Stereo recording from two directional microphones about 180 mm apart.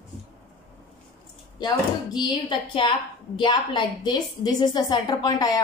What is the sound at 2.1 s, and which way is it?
A woman's voice, 25° left (ahead or behind).